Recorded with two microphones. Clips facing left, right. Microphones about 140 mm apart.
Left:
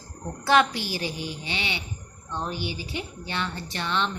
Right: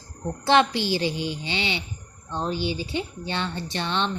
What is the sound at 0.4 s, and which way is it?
Speech, 25° right (ahead or behind).